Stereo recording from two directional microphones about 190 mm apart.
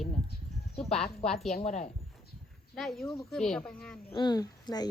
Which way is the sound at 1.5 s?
35° left (ahead or behind).